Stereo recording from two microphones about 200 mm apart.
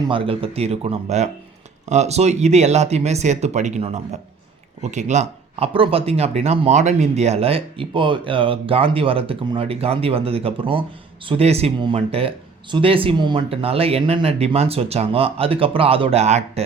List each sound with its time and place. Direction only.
0.1 s speech: 25° right (ahead or behind)